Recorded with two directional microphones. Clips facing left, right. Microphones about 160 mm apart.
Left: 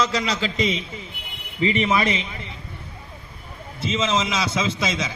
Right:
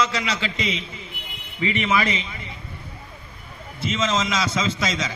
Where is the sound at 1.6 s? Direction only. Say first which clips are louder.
Left 2 dB; 35° left (ahead or behind).